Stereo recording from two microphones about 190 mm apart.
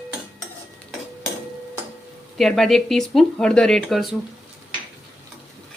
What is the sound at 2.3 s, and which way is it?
Speech, centre (ahead or behind).